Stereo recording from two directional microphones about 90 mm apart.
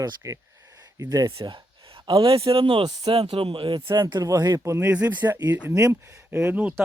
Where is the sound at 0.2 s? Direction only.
35° right (ahead or behind).